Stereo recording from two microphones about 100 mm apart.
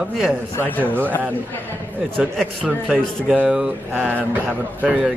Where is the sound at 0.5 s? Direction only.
20° left (ahead or behind).